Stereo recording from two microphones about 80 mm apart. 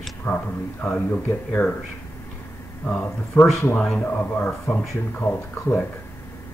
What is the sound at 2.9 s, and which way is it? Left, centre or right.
Speech, centre.